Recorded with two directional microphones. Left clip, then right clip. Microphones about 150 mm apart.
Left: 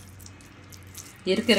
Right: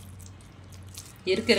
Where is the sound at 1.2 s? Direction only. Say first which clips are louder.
Left 1 dB; 40° left (ahead or behind).